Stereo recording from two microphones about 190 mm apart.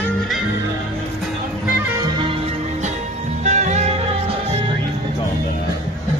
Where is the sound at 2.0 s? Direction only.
25° right (ahead or behind).